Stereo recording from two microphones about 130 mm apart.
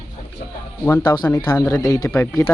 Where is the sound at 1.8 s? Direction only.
30° left (ahead or behind).